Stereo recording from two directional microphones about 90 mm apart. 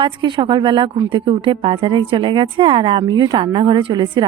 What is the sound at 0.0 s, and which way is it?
Speech, 65° right (ahead or behind).